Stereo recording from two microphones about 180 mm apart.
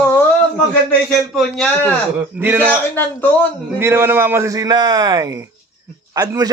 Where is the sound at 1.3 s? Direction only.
Centre (ahead or behind).